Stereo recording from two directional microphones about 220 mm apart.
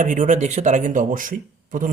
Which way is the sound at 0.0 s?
35° right (ahead or behind).